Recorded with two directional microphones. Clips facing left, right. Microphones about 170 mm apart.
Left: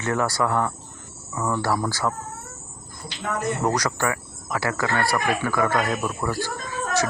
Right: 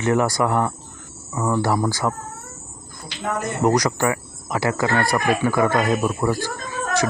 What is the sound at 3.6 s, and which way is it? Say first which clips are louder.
Speech: right 8 dB; 15° right (ahead or behind).